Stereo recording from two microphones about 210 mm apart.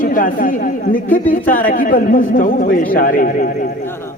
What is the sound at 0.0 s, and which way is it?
A woman's voice, 40° left (ahead or behind).